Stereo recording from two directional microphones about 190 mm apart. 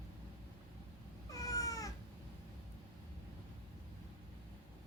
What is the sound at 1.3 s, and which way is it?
Cat, 20° left (ahead or behind).